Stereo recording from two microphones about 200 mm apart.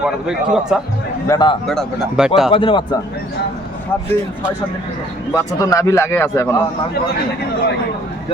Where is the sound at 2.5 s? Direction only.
25° left (ahead or behind).